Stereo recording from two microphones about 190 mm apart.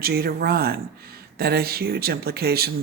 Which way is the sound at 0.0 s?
55° right (ahead or behind).